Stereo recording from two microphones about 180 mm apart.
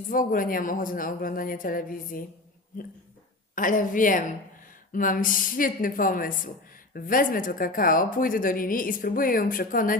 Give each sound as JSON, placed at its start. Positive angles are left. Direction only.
{"t": 0.1, "sound": "speech", "side_deg": 50}